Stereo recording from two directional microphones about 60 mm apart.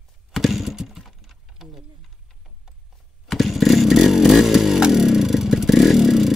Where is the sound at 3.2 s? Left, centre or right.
Centre.